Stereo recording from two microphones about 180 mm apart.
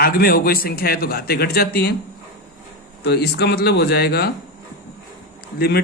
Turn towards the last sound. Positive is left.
turn(degrees=60)  # may be behind; listen again after turning